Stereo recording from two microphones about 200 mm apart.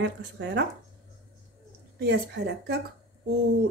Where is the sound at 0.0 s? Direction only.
60° right (ahead or behind).